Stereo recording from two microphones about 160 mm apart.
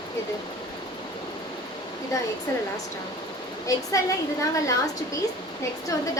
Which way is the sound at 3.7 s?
20° left (ahead or behind).